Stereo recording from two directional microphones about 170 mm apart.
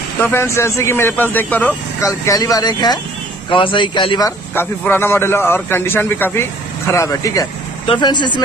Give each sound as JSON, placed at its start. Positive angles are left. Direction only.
{"t": 0.2, "sound": "a man's voice", "side_deg": 15}
{"t": 2.0, "sound": "speech", "side_deg": 20}
{"t": 4.6, "sound": "a man's voice", "side_deg": 15}